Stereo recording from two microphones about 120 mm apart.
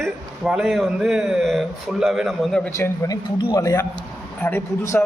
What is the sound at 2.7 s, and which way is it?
A man's voice, 25° left (ahead or behind).